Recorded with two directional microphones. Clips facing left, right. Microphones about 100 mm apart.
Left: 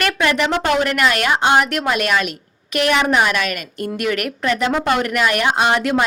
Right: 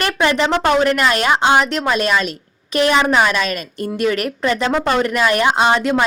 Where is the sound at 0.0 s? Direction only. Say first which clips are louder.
Right 1 dB; 25° right (ahead or behind).